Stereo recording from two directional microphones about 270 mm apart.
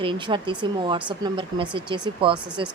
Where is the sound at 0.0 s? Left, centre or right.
Centre.